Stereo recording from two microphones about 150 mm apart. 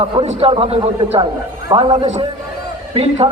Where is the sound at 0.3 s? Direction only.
40° right (ahead or behind).